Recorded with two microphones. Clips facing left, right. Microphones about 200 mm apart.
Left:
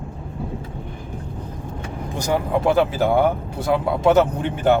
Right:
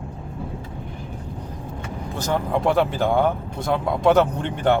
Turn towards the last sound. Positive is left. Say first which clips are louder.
# left 2 dB
turn(degrees=5)  # may be behind; listen again after turning